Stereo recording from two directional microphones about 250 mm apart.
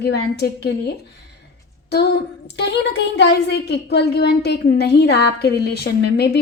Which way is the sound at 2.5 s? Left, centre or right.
Left.